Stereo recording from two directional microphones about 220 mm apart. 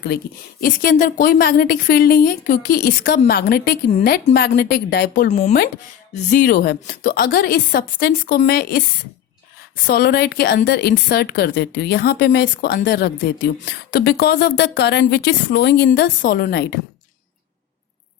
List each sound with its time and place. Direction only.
0.6 s a woman's voice: 40° left (ahead or behind)
5.3 s speech: 30° left (ahead or behind)
6.3 s a woman's voice: 40° left (ahead or behind)
9.8 s a woman's voice: 45° left (ahead or behind)